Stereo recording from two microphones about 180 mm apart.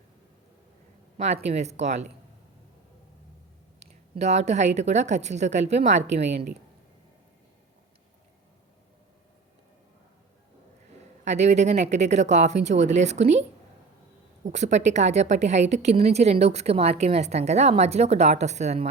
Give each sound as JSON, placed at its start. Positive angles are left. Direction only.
{"t": 1.1, "sound": "a woman's voice", "side_deg": -40}
{"t": 3.8, "sound": "a woman's voice", "side_deg": -40}
{"t": 11.3, "sound": "a woman's voice", "side_deg": -40}
{"t": 14.4, "sound": "a woman's voice", "side_deg": -40}